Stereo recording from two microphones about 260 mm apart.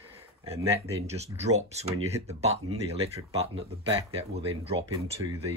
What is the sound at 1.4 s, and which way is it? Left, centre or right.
Speech, right.